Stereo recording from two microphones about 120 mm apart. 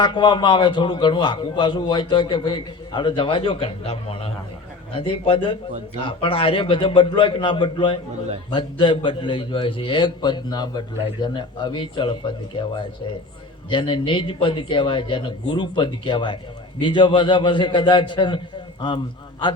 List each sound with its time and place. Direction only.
0.0 s a man's voice: 40° left (ahead or behind)
13.7 s a man's voice: 45° left (ahead or behind)